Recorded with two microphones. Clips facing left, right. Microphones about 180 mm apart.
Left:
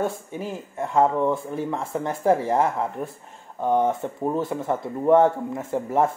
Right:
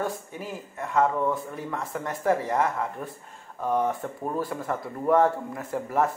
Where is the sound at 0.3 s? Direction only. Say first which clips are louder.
Left 5 dB; 25° left (ahead or behind).